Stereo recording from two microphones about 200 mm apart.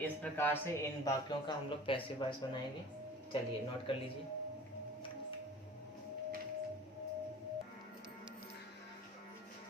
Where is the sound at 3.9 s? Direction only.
25° left (ahead or behind).